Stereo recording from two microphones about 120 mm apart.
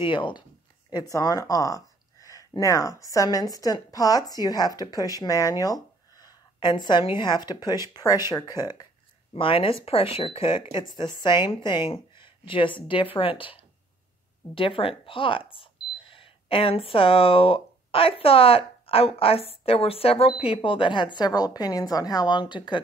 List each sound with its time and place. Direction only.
0.0 s speech: 45° left (ahead or behind)
0.9 s speech: 30° left (ahead or behind)
9.3 s speech: 50° left (ahead or behind)